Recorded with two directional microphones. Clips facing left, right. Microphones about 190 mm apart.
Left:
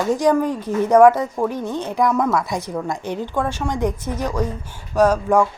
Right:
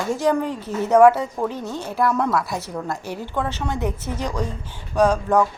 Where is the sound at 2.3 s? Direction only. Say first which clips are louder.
Left 2 dB; centre (ahead or behind).